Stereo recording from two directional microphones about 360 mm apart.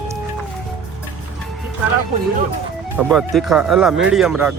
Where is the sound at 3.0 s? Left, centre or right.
Centre.